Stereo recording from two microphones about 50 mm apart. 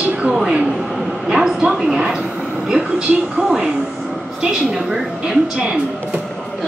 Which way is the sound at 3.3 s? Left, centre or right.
Centre.